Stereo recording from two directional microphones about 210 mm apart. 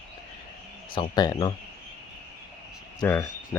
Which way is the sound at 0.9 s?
20° left (ahead or behind).